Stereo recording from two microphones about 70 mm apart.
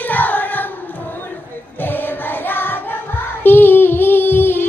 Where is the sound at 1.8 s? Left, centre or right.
Left.